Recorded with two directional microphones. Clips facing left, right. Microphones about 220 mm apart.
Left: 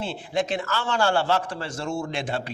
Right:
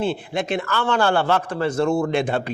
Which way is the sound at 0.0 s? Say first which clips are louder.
Right 3 dB; 55° right (ahead or behind).